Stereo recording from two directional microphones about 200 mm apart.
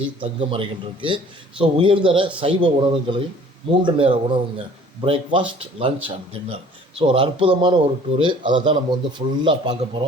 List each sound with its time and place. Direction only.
0.2 s speech: 25° right (ahead or behind)